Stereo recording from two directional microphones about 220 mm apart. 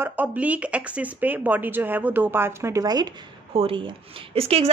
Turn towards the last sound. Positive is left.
turn(degrees=-25)  # may be behind; listen again after turning